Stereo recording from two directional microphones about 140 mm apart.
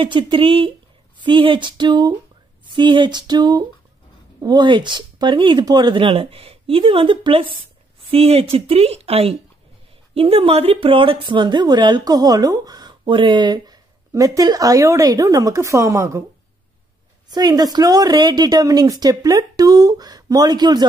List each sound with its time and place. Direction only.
0.0 s a woman's voice: 35° right (ahead or behind); by 16.3 s 20° right (ahead or behind)
17.3 s a woman's voice: 30° right (ahead or behind)